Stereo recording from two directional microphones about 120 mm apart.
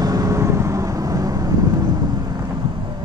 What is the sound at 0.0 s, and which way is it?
Vehicle, 30° right (ahead or behind).